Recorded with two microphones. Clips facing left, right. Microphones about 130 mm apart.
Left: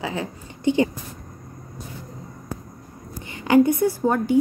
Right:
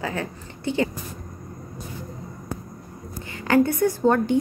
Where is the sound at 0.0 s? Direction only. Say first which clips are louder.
Even; 15° left (ahead or behind).